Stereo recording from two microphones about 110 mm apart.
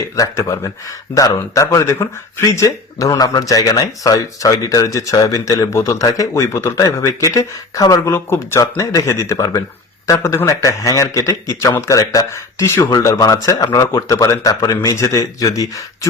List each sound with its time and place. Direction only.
0.2 s a man's voice: 30° left (ahead or behind)